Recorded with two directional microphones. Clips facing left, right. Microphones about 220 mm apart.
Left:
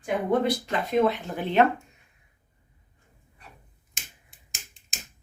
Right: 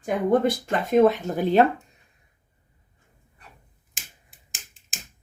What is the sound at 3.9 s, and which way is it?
Finger snapping, centre (ahead or behind).